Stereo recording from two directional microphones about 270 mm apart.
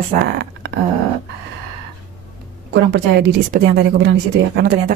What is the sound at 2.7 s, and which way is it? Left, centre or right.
A woman's voice, right.